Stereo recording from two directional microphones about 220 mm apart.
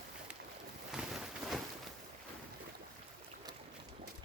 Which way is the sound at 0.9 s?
Centre (ahead or behind).